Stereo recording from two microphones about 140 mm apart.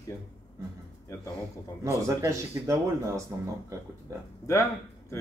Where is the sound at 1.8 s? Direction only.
20° right (ahead or behind).